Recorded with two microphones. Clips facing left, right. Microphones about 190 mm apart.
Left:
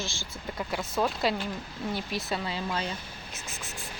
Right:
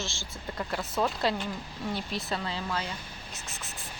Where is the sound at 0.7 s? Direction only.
Centre (ahead or behind).